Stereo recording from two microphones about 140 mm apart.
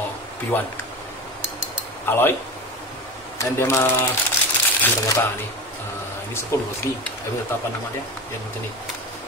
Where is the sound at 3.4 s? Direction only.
20° left (ahead or behind).